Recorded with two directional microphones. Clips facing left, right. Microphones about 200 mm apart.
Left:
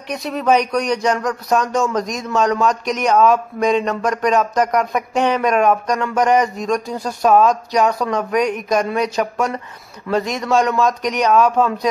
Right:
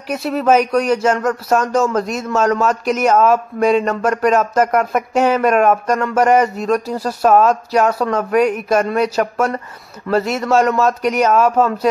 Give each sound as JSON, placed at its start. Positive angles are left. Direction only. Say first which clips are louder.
{"t": 0.1, "sound": "speech", "louder": "right 3 dB", "side_deg": -5}